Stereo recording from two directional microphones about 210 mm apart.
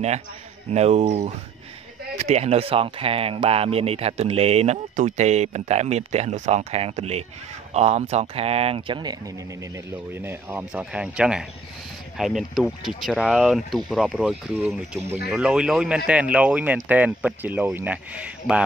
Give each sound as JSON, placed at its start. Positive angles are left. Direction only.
{"t": 0.7, "sound": "speech", "side_deg": -30}
{"t": 10.1, "sound": "speech", "side_deg": -10}